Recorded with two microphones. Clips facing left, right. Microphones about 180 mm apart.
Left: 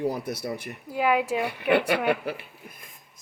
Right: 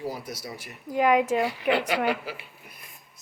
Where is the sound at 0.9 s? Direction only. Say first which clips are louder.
Right 2 dB; 5° left (ahead or behind).